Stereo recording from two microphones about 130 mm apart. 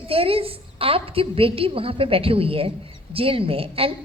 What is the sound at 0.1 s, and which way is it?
A woman's voice, 45° right (ahead or behind).